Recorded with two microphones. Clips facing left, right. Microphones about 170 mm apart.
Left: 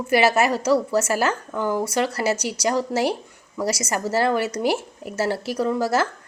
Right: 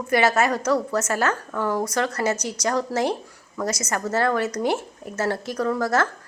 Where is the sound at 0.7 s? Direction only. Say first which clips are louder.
Left 3 dB; 30° left (ahead or behind).